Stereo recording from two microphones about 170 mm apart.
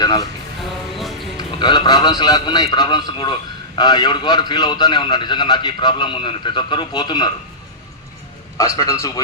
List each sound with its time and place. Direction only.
0.0 s speech: 25° left (ahead or behind)
0.6 s music: centre (ahead or behind)
1.4 s a man's voice: 25° left (ahead or behind)
8.5 s a man's voice: 20° left (ahead or behind)